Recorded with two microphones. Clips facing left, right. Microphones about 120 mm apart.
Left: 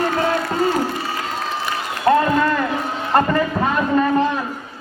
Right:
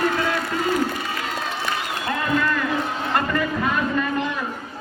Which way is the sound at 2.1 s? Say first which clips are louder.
Left 8 dB; 35° left (ahead or behind).